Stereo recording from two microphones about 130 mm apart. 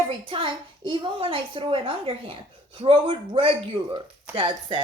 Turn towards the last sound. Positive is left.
turn(degrees=-40)  # may be behind; listen again after turning